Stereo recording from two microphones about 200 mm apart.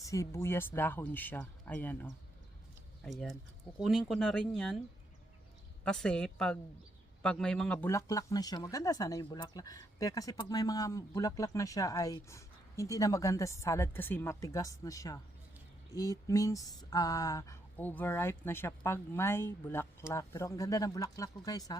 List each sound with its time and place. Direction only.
0.0 s speech: 15° left (ahead or behind)
5.8 s speech: 5° left (ahead or behind)